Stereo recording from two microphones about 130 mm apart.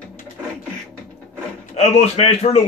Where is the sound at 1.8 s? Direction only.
50° left (ahead or behind).